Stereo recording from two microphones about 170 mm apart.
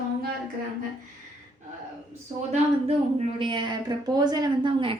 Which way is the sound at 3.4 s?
30° right (ahead or behind).